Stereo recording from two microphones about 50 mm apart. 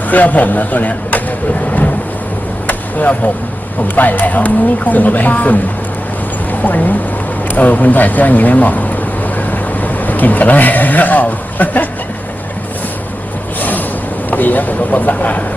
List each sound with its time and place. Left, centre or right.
0.1 s speech: left
2.6 s chop: left
3.8 s speech: left
9.2 s a sound: left
13.6 s a sound: left
14.3 s speech: left